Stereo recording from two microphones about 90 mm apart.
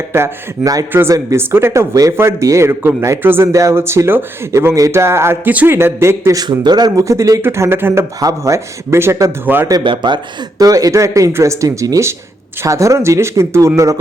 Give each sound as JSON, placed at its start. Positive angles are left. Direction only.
{"t": 0.1, "sound": "speech", "side_deg": -30}
{"t": 1.9, "sound": "speech", "side_deg": -40}
{"t": 8.2, "sound": "speech", "side_deg": -40}
{"t": 9.8, "sound": "a man's voice", "side_deg": -60}
{"t": 10.6, "sound": "speech", "side_deg": -40}